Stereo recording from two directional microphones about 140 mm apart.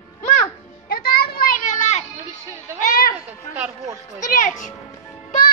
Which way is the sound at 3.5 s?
20° right (ahead or behind).